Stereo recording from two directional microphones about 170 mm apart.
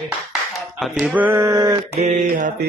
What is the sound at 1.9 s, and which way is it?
Mantra, 45° right (ahead or behind).